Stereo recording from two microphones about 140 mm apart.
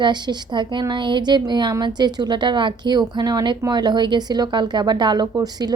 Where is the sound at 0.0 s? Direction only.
30° right (ahead or behind).